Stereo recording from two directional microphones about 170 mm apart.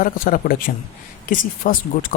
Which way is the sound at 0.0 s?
55° left (ahead or behind).